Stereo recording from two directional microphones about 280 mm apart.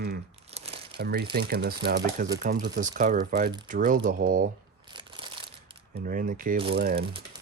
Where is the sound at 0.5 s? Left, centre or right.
Right.